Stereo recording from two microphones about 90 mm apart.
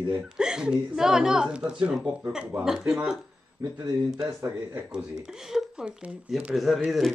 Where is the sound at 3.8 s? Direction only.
45° right (ahead or behind).